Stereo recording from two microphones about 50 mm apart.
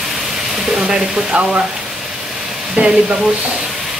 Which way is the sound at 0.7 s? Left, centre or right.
Centre.